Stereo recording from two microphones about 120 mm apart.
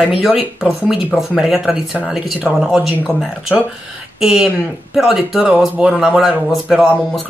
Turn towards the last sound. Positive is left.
turn(degrees=-5)  # may be behind; listen again after turning